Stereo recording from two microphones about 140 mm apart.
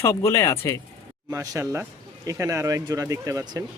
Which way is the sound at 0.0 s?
20° left (ahead or behind).